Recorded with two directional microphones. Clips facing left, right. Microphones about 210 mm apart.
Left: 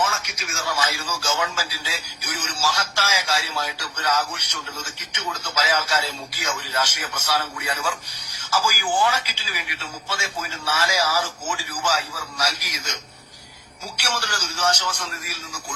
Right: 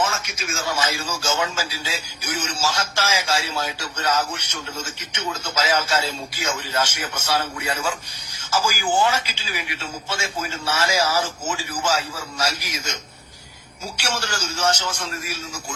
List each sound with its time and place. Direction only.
0.0 s speech: 25° right (ahead or behind)